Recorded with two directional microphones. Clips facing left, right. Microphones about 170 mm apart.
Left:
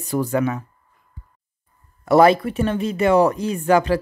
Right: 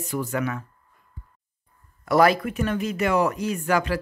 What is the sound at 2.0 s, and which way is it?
Speech, 25° left (ahead or behind).